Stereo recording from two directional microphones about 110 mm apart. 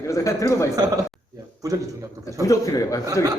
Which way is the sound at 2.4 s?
30° left (ahead or behind).